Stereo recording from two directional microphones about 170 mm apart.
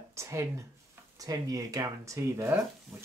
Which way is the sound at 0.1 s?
15° right (ahead or behind).